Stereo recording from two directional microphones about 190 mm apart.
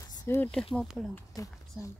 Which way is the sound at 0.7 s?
Centre (ahead or behind).